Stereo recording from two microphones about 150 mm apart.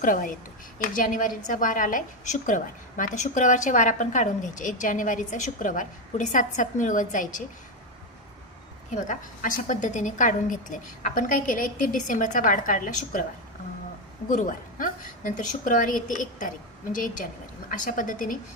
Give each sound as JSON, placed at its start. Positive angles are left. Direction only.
{"t": 0.0, "sound": "a woman's voice", "side_deg": 60}
{"t": 8.9, "sound": "a woman's voice", "side_deg": 55}
{"t": 14.3, "sound": "a woman's voice", "side_deg": 60}